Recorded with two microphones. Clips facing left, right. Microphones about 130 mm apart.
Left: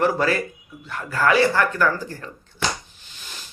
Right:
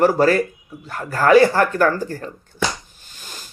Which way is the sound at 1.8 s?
45° right (ahead or behind).